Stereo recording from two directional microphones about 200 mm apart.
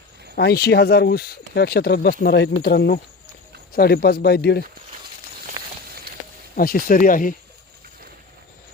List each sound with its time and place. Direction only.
0.3 s speech: 55° left (ahead or behind)
6.6 s speech: 45° left (ahead or behind)